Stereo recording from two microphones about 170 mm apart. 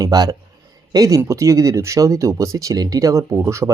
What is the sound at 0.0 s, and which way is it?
Speech, 20° right (ahead or behind).